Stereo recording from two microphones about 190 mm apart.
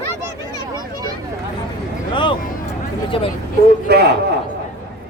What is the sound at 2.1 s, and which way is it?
Speech, 25° left (ahead or behind).